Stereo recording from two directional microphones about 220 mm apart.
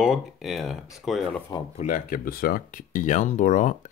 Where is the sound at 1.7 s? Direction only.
35° left (ahead or behind).